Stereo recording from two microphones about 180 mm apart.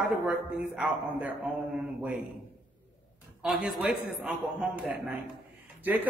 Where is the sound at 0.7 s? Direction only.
5° right (ahead or behind).